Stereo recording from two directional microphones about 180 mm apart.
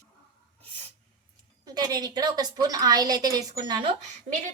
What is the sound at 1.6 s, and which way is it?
A woman's voice, 20° right (ahead or behind).